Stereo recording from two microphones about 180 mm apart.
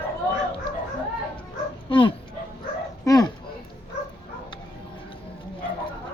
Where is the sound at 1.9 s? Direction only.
30° left (ahead or behind).